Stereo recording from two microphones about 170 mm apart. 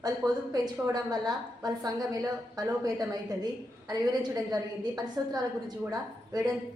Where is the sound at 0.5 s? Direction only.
25° right (ahead or behind).